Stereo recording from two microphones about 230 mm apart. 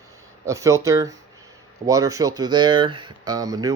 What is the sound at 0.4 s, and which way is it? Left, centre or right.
Speech, centre.